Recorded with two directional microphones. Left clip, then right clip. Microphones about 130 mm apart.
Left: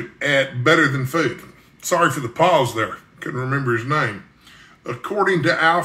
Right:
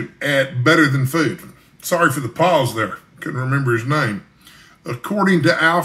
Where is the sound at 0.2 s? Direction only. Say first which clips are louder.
Right 1 dB; centre (ahead or behind).